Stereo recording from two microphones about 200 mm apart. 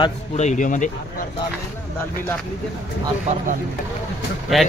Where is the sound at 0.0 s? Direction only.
35° left (ahead or behind).